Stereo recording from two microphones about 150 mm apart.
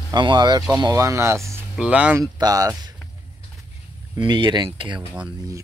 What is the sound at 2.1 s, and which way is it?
Speech, 25° right (ahead or behind).